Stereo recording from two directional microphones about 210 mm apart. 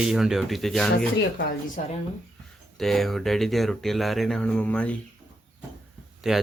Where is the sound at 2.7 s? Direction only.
Centre (ahead or behind).